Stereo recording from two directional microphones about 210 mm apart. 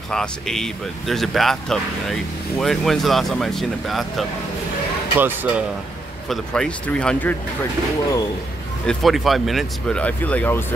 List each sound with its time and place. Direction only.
0.1 s speech: 5° left (ahead or behind)
6.2 s speech: centre (ahead or behind)
8.8 s speech: centre (ahead or behind)